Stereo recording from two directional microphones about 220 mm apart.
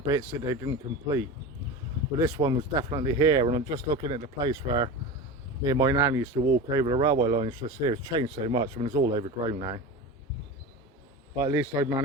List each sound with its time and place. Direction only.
0.0 s speech: 15° right (ahead or behind)
11.3 s speech: 10° right (ahead or behind)